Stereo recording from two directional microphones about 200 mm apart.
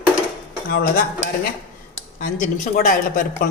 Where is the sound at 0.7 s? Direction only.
50° left (ahead or behind).